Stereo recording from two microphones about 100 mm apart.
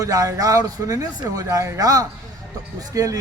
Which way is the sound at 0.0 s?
35° right (ahead or behind).